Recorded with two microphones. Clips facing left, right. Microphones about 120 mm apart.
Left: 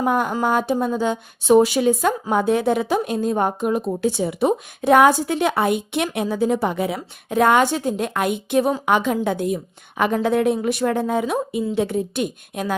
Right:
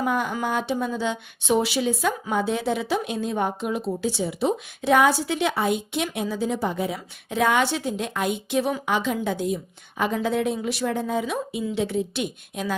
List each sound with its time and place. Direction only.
0.0 s a woman's voice: 45° left (ahead or behind)